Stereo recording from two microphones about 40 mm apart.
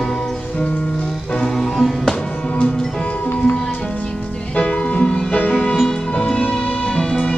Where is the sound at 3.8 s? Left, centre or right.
Left.